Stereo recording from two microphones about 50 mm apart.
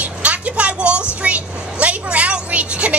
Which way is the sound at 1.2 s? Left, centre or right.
Right.